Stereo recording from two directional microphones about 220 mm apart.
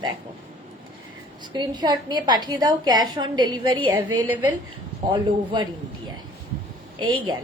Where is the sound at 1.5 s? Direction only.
20° right (ahead or behind).